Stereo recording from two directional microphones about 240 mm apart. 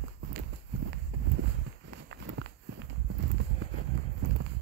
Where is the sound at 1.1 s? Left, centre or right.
Right.